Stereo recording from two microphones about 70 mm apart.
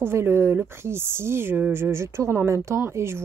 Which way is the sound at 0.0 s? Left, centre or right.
Right.